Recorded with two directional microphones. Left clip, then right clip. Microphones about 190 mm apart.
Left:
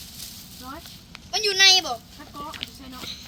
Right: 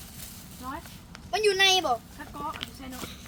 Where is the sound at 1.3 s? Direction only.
45° right (ahead or behind).